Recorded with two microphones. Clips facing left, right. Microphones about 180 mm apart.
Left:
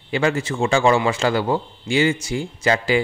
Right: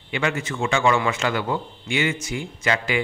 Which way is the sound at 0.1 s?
35° left (ahead or behind).